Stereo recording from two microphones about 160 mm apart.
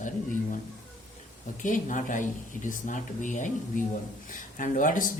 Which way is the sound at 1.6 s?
55° left (ahead or behind).